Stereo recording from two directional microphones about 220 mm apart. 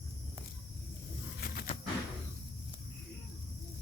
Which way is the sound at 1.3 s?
40° left (ahead or behind).